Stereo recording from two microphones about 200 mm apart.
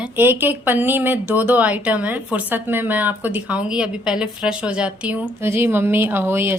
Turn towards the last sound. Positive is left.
turn(degrees=-10)  # may be behind; listen again after turning